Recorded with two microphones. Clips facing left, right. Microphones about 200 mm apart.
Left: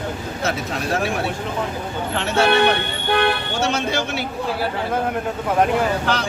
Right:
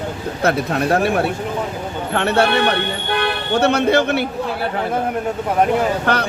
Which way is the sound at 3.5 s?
60° right (ahead or behind).